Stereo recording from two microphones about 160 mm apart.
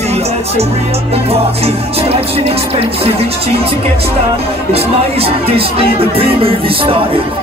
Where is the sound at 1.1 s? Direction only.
40° right (ahead or behind).